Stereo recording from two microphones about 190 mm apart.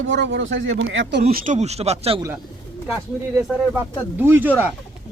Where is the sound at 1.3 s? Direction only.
40° right (ahead or behind).